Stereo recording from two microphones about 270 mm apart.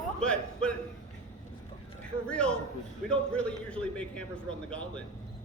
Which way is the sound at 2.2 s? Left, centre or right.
Centre.